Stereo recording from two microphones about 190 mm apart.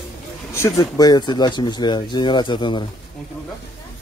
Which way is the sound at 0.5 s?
15° left (ahead or behind).